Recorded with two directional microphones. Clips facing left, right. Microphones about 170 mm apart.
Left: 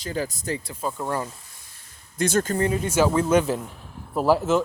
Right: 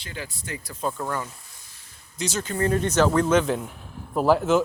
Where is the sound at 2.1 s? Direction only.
50° left (ahead or behind).